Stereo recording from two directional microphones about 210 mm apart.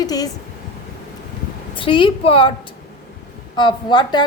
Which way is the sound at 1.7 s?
25° left (ahead or behind).